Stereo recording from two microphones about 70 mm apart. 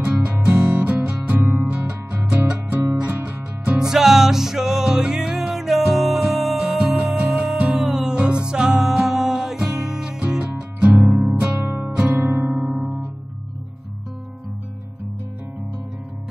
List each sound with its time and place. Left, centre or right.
0.0 s music: centre
0.7 s music: right
3.9 s music: centre
11.6 s music: right
12.5 s guitar: centre